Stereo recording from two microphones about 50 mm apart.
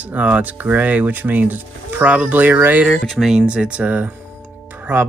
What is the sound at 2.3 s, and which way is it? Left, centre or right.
Speech, right.